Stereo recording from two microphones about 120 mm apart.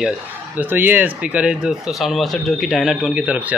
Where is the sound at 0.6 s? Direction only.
15° right (ahead or behind).